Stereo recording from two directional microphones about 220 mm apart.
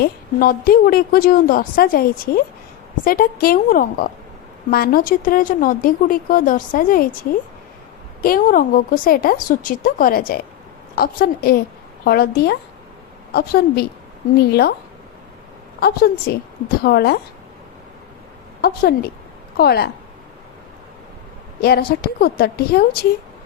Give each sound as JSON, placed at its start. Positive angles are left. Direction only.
{"t": 0.0, "sound": "a woman's voice", "side_deg": 40}
{"t": 8.2, "sound": "a woman's voice", "side_deg": 40}
{"t": 15.8, "sound": "a woman's voice", "side_deg": 45}
{"t": 18.6, "sound": "a woman's voice", "side_deg": 45}
{"t": 21.6, "sound": "a woman's voice", "side_deg": 45}